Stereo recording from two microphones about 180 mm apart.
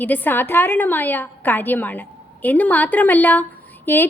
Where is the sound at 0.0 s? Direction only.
10° left (ahead or behind).